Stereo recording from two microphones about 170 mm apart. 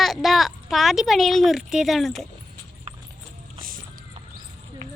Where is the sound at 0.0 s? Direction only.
Centre (ahead or behind).